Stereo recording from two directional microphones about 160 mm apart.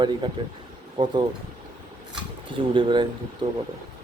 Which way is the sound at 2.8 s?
30° right (ahead or behind).